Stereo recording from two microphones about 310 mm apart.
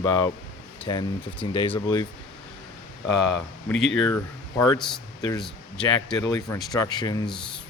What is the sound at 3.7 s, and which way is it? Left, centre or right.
Speech, left.